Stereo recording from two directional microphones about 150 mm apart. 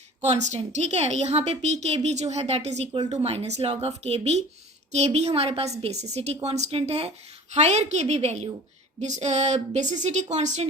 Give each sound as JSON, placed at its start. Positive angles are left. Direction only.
{"t": 0.2, "sound": "a woman's voice", "side_deg": -50}